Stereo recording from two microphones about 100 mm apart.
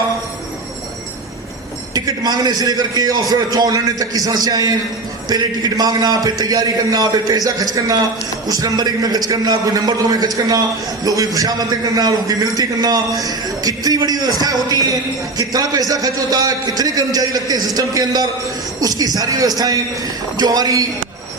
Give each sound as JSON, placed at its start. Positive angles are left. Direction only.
{"t": 1.9, "sound": "a man's voice", "side_deg": -40}